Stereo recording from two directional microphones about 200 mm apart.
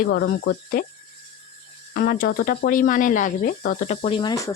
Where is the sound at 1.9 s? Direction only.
45° left (ahead or behind); by 4.5 s 20° left (ahead or behind).